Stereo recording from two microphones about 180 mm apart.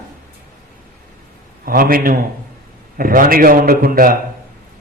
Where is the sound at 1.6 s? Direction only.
55° right (ahead or behind).